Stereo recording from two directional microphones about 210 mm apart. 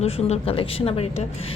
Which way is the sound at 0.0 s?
30° left (ahead or behind).